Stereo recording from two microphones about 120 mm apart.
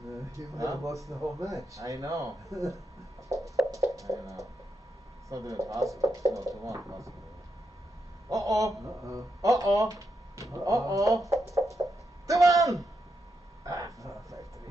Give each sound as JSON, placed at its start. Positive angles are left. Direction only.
{"t": 0.6, "sound": "speech", "side_deg": -25}
{"t": 0.9, "sound": "a man's voice", "side_deg": 0}
{"t": 1.8, "sound": "speech", "side_deg": -25}
{"t": 3.3, "sound": "music", "side_deg": 0}
{"t": 3.7, "sound": "a sound", "side_deg": -25}
{"t": 5.3, "sound": "speech", "side_deg": -30}
{"t": 8.3, "sound": "speech", "side_deg": -30}
{"t": 13.7, "sound": "vehicle", "side_deg": -25}